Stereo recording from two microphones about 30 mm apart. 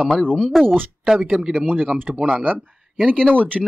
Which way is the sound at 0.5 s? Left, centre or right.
Centre.